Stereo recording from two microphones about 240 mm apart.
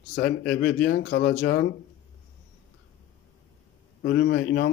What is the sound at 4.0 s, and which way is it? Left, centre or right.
Speech, left.